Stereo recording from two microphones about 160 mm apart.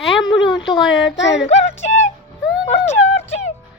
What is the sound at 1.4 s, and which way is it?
Music, 45° left (ahead or behind).